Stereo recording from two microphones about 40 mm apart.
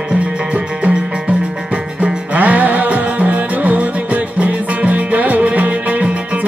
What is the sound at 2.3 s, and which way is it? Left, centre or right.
Music, right.